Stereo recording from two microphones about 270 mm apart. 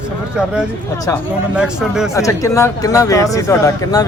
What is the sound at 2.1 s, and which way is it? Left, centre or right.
Speech, centre.